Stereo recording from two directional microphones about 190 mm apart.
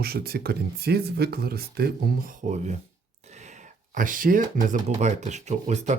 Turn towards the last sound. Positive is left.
turn(degrees=-40)  # may be behind; listen again after turning